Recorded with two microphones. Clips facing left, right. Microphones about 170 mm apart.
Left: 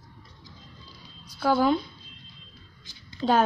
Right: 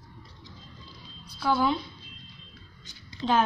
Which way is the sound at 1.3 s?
50° left (ahead or behind).